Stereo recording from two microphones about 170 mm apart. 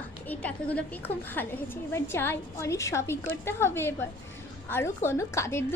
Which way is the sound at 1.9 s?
15° left (ahead or behind).